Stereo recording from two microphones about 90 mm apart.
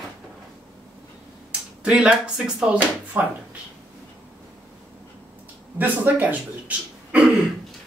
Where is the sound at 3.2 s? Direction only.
20° right (ahead or behind).